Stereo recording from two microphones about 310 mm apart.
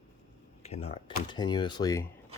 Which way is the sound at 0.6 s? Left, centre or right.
Centre.